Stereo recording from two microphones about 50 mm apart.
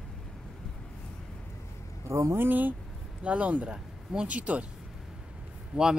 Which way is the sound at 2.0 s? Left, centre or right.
Right.